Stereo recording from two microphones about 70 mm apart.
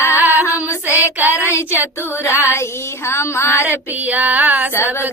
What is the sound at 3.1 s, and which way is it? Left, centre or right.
Child singing, left.